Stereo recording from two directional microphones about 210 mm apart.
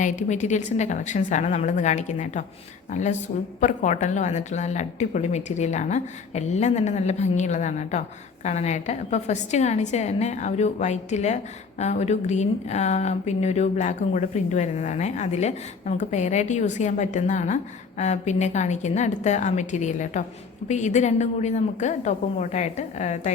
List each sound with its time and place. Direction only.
0.0 s speech: 35° left (ahead or behind)